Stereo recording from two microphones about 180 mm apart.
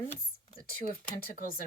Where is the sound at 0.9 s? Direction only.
55° left (ahead or behind).